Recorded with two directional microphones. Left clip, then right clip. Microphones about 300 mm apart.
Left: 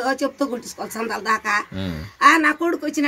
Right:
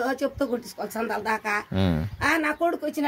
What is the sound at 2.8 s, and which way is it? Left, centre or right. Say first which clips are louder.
Speech: left 4 dB; centre.